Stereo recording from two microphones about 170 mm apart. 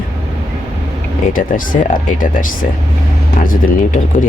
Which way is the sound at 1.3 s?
55° left (ahead or behind).